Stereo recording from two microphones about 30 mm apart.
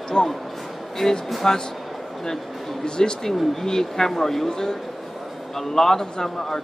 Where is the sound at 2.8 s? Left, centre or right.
Left.